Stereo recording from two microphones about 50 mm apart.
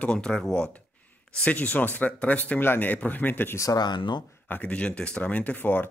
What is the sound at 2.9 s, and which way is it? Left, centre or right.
Speech, left.